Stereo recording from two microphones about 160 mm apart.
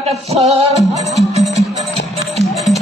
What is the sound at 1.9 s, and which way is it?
Music, 40° right (ahead or behind).